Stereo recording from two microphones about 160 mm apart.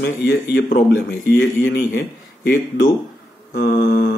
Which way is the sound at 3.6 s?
85° left.